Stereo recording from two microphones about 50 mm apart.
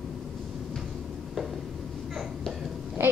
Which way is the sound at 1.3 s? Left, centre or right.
Centre.